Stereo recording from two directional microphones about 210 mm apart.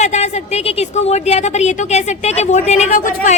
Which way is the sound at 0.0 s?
30° left (ahead or behind).